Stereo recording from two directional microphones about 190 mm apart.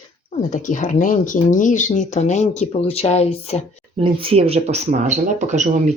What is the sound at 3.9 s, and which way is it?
Speech, 30° right (ahead or behind).